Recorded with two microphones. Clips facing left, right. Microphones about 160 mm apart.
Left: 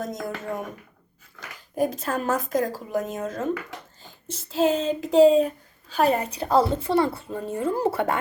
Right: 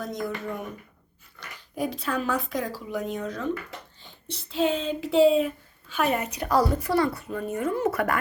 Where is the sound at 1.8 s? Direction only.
45° left (ahead or behind).